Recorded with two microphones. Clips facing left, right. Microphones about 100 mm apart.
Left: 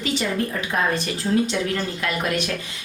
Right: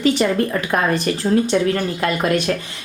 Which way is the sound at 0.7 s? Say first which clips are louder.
Right 4 dB; 60° right (ahead or behind).